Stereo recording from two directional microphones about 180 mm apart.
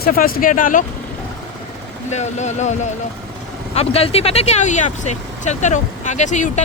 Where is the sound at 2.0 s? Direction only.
40° left (ahead or behind).